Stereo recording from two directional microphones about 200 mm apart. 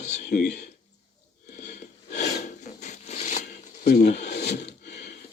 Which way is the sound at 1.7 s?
35° left (ahead or behind).